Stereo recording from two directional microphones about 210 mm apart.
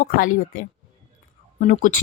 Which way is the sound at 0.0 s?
40° left (ahead or behind).